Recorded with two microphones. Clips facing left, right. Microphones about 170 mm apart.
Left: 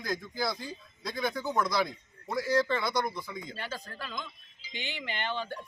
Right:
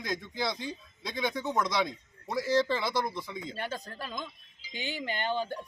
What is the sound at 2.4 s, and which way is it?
Speech, 25° right (ahead or behind).